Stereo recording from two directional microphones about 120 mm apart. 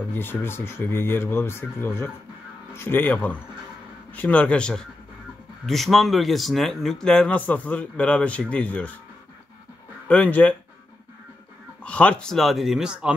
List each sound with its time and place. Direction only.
0.1 s speech: 15° left (ahead or behind)
10.0 s speech: 10° left (ahead or behind)
11.8 s speech: 10° left (ahead or behind); by 13.1 s 5° right (ahead or behind)